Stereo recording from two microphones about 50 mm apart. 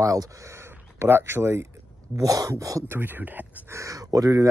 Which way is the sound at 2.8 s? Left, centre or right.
Right.